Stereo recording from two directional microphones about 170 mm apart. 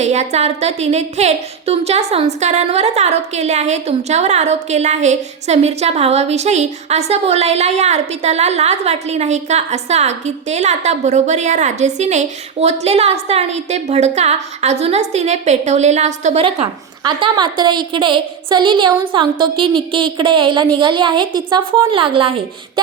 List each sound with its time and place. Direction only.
0.0 s a woman's voice: 40° right (ahead or behind)
17.0 s a woman's voice: 25° right (ahead or behind)